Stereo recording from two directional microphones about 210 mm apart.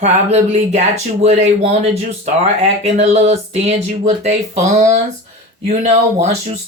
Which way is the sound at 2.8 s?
30° right (ahead or behind).